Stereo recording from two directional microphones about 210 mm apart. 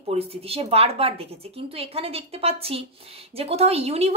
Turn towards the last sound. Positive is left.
turn(degrees=-30)  # may be behind; listen again after turning